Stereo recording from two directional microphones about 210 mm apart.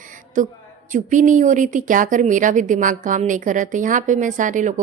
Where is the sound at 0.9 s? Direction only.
35° right (ahead or behind).